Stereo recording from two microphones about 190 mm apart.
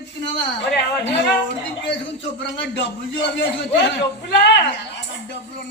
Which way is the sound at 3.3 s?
65° left (ahead or behind).